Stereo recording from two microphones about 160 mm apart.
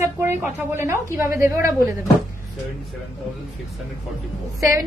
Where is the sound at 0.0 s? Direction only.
15° right (ahead or behind).